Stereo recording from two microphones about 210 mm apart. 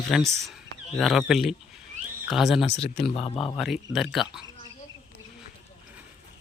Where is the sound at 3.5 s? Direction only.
Centre (ahead or behind).